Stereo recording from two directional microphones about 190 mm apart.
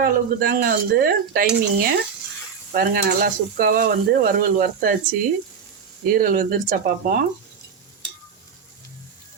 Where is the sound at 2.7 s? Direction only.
50° right (ahead or behind).